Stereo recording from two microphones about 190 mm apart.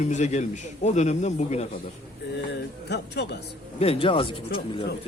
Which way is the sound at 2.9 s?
65° left (ahead or behind).